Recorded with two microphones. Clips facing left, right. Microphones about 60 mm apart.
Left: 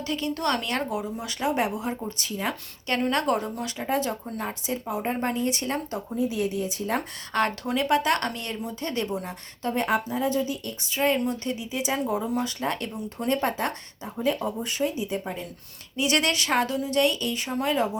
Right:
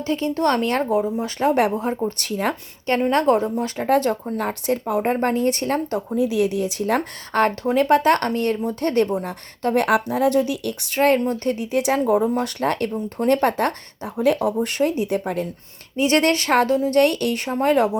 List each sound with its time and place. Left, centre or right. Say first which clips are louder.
0.0 s speech: right 7 dB; right
1.5 s speech: right 7 dB; right
3.1 s speech: right 8 dB; right
3.8 s speech: right 8 dB; right
6.1 s speech: right 6 dB; right
7.3 s speech: right 7 dB; right
11.2 s speech: right 6 dB; right
16.0 s speech: right 6 dB; right
17.4 s speech: right 7 dB; right